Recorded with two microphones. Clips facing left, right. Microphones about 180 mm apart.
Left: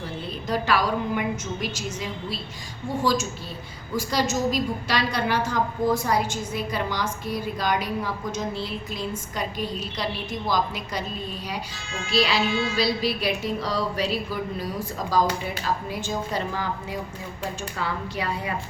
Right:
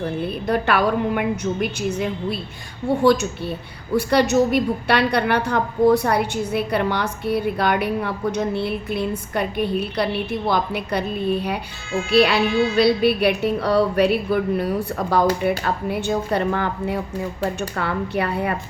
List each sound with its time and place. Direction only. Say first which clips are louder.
0.0 s a woman's voice: right 8 dB; 60° right (ahead or behind)